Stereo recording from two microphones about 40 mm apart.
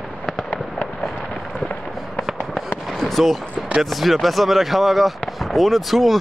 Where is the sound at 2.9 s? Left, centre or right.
Centre.